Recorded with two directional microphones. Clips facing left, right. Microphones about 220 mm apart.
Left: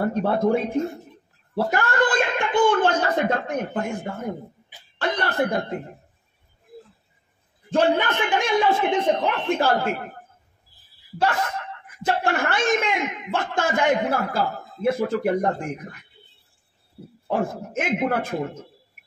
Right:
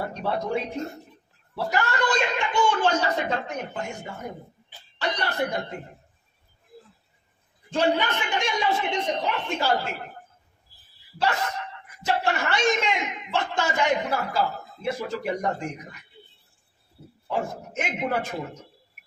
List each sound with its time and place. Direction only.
0.0 s speech: 50° left (ahead or behind)
7.7 s speech: 50° left (ahead or behind)
11.1 s speech: 50° left (ahead or behind)
17.3 s speech: 50° left (ahead or behind)